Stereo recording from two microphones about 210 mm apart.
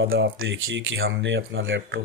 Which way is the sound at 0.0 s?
65° right (ahead or behind).